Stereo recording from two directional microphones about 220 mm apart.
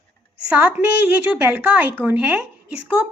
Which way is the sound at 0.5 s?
5° right (ahead or behind).